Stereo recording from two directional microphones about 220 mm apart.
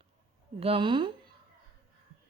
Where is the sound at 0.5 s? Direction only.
25° right (ahead or behind).